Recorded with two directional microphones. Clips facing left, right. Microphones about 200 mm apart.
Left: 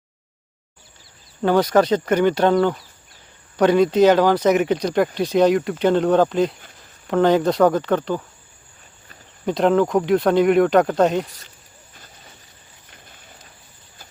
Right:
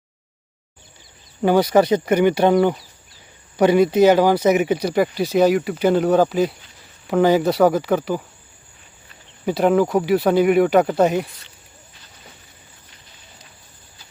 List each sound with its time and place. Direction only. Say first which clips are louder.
1.4 s speech: right 1 dB; 10° right (ahead or behind)
9.5 s speech: even; 5° right (ahead or behind)
12.9 s a sound: left 3 dB; 50° left (ahead or behind)